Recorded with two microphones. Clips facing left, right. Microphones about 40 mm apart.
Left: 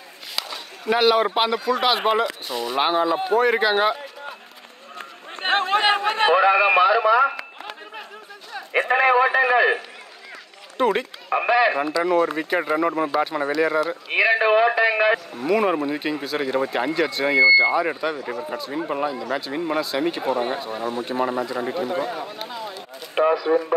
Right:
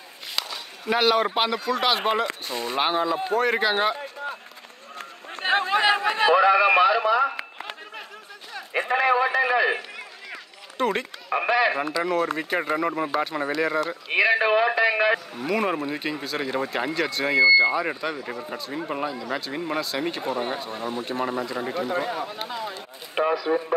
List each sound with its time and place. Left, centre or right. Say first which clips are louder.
0.4 s a man's voice: left 1 dB; centre
2.5 s speech: left 3 dB; left
2.8 s a man's voice: left 3 dB; centre
5.3 s chatter: left 2 dB; left
6.3 s a man's voice: left 1 dB; left
6.8 s radio: left 3 dB; centre
8.7 s a man's voice: left 4 dB; centre
10.8 s a man's voice: left 4 dB; centre